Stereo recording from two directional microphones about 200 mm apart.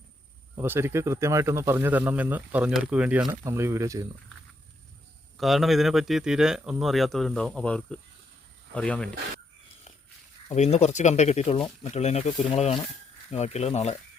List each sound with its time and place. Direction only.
0.5 s speech: 10° right (ahead or behind)
5.4 s speech: centre (ahead or behind)
10.5 s speech: 35° left (ahead or behind)